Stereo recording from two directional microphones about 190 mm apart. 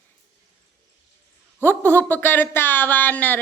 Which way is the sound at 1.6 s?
10° left (ahead or behind).